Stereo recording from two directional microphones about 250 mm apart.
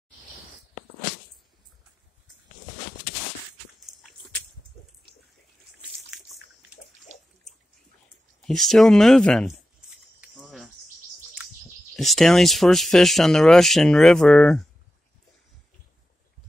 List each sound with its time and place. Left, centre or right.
5.9 s drip: centre
8.4 s a sound: centre
11.9 s speech: centre